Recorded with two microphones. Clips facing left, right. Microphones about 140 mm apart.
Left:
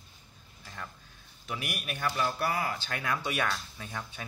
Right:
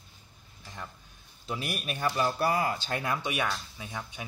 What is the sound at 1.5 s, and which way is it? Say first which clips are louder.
Speech: right 3 dB; 30° right (ahead or behind).